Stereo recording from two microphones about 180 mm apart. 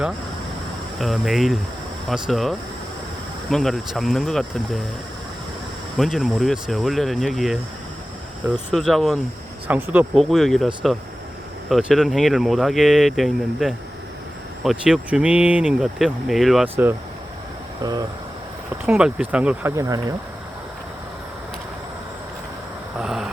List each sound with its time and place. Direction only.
0.9 s speech: centre (ahead or behind)
6.0 s speech: centre (ahead or behind)
11.7 s speech: centre (ahead or behind)
18.9 s speech: 5° right (ahead or behind)
19.7 s speech: 20° right (ahead or behind)
23.0 s vehicle: 5° right (ahead or behind)